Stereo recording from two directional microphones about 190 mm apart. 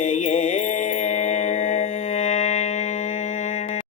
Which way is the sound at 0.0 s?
40° left (ahead or behind).